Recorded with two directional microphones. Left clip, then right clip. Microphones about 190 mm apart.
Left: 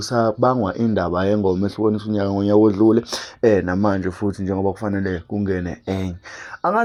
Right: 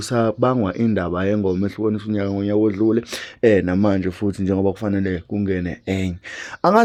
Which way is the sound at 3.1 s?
20° right (ahead or behind).